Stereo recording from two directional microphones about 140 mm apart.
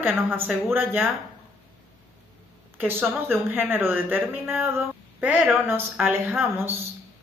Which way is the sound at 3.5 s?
15° right (ahead or behind).